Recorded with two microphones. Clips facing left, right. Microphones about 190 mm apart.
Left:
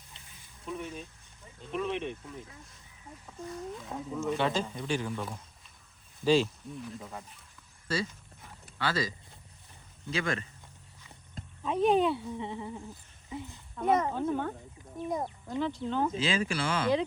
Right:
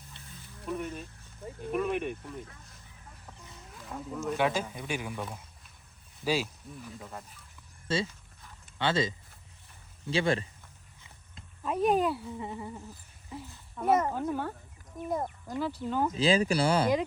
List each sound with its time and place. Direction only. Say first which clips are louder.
0.6 s speech: right 3 dB; 5° right (ahead or behind)
3.8 s speech: right 4 dB; centre (ahead or behind)
6.2 s speech: left 5 dB; 5° right (ahead or behind)
7.9 s speech: right 2 dB; 25° right (ahead or behind)
11.6 s speech: left 1 dB; 5° right (ahead or behind)
16.1 s speech: right 5 dB; 35° right (ahead or behind)